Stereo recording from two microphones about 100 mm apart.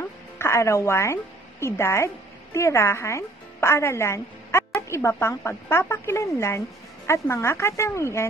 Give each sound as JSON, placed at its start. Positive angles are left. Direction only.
{"t": 0.4, "sound": "a woman's voice", "side_deg": 30}